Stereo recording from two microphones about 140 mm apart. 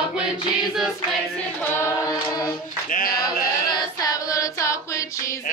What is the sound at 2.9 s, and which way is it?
Mantra, 90° left.